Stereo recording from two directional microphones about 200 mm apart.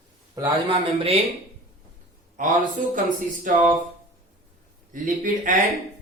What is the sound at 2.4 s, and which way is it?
Speech, 40° right (ahead or behind).